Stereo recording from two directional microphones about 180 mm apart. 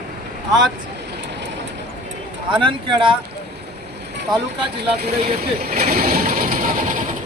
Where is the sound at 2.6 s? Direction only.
30° right (ahead or behind).